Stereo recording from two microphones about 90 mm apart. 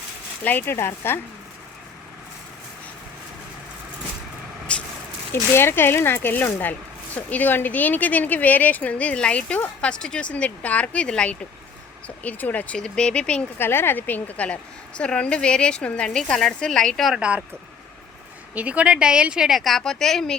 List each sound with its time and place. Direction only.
0.4 s speech: 25° left (ahead or behind)
4.7 s vehicle: 10° left (ahead or behind)
5.3 s a woman's voice: 25° left (ahead or behind); by 13.4 s 10° left (ahead or behind)
13.6 s a woman's voice: 25° left (ahead or behind); by 17.2 s 5° left (ahead or behind)
17.2 s speech: 15° right (ahead or behind)
18.5 s speech: 15° right (ahead or behind); by 20.4 s 5° left (ahead or behind)